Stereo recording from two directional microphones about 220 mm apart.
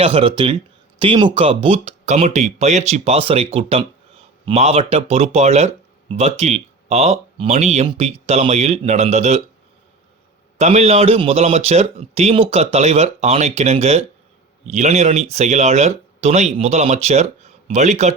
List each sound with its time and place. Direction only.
0.0 s speech: 25° right (ahead or behind)
10.6 s speech: 30° right (ahead or behind)